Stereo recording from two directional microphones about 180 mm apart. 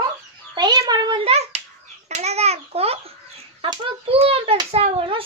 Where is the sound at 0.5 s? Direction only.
20° right (ahead or behind).